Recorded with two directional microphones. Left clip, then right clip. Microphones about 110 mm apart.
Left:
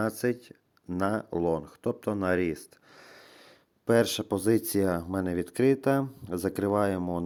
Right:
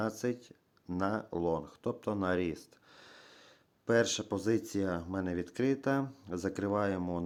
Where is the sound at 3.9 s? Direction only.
45° left (ahead or behind).